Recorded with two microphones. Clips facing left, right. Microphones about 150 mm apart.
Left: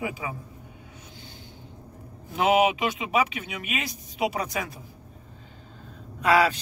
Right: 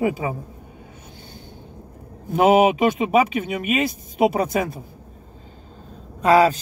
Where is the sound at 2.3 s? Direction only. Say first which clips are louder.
Right 6 dB; 45° right (ahead or behind).